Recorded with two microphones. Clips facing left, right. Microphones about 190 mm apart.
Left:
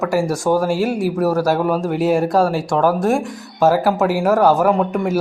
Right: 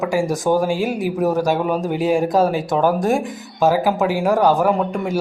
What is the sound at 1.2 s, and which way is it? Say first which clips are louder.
Speech: even; 20° right (ahead or behind).